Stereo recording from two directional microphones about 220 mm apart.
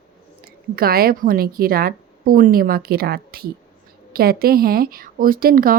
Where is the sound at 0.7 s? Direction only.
45° right (ahead or behind).